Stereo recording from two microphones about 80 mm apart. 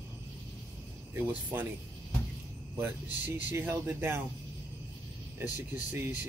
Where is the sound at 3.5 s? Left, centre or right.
Right.